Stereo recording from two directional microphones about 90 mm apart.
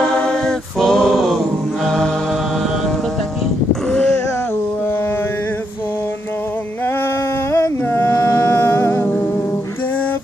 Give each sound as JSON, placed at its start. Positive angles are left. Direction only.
{"t": 0.0, "sound": "a capella", "side_deg": 10}
{"t": 3.9, "sound": "a sound", "side_deg": 10}
{"t": 7.5, "sound": "music", "side_deg": 30}